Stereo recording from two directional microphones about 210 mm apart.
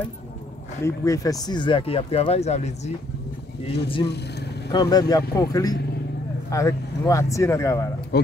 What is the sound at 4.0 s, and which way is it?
Speech, 50° left (ahead or behind).